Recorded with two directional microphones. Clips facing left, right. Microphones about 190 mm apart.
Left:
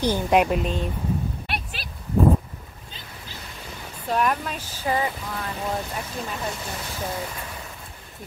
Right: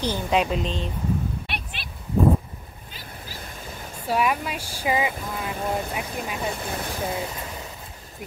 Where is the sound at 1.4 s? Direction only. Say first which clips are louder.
Left 3 dB; 40° left (ahead or behind).